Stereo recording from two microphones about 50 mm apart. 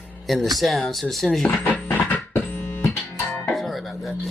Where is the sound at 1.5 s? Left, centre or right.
Left.